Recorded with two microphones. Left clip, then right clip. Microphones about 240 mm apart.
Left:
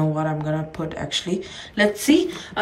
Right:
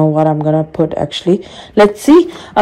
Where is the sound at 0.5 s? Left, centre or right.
Centre.